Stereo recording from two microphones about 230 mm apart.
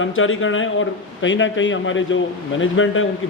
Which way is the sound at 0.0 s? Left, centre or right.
Left.